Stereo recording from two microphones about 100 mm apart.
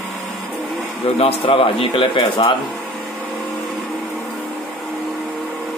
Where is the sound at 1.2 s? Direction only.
70° left (ahead or behind).